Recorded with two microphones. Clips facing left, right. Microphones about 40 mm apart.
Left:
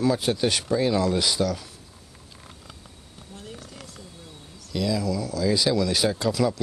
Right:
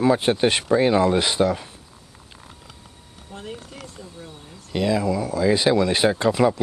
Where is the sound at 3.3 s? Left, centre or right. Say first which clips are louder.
Right 6 dB; right.